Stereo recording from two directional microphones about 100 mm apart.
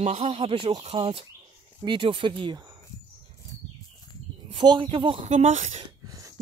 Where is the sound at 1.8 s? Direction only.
55° right (ahead or behind).